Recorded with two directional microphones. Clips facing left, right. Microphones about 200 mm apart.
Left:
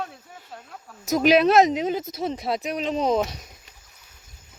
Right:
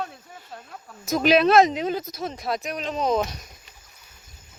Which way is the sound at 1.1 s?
15° left (ahead or behind).